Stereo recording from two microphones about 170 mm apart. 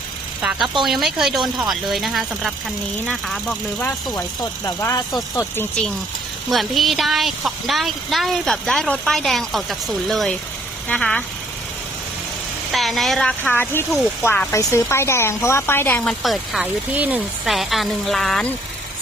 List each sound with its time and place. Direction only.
0.4 s speech: centre (ahead or behind)
4.1 s speech: 20° left (ahead or behind)
6.5 s speech: centre (ahead or behind)
12.7 s speech: centre (ahead or behind)
14.3 s speech: 15° left (ahead or behind)